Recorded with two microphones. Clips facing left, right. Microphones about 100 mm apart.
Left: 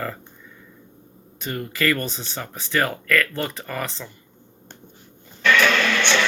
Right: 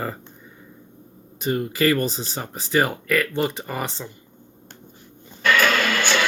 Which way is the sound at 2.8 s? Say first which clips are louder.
Even; 15° right (ahead or behind).